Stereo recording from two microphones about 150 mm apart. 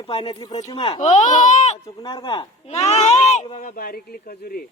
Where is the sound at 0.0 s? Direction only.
40° left (ahead or behind).